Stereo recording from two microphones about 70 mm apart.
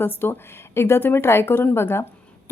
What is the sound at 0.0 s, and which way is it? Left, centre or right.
A woman's voice, left.